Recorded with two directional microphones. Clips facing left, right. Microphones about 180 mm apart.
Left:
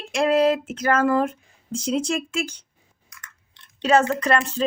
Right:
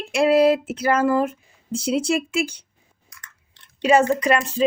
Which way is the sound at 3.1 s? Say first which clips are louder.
Left 1 dB; 35° right (ahead or behind).